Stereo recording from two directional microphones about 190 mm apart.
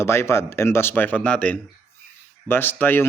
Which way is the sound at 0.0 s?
15° left (ahead or behind).